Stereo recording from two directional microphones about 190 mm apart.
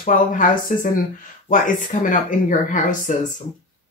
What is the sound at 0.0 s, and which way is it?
Speech, 45° left (ahead or behind).